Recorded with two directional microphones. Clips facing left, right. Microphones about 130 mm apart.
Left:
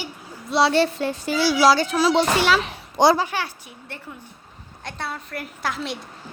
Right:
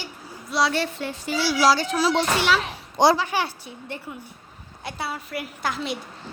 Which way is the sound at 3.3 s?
10° right (ahead or behind).